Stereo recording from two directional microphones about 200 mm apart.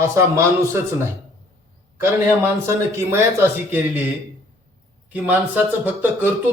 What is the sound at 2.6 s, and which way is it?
A man's voice, 15° right (ahead or behind).